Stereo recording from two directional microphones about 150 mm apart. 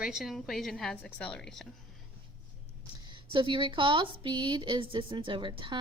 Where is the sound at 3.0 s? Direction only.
30° right (ahead or behind).